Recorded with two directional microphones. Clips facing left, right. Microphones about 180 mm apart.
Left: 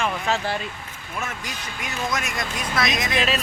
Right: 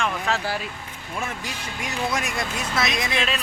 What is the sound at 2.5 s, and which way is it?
Speech, 25° right (ahead or behind).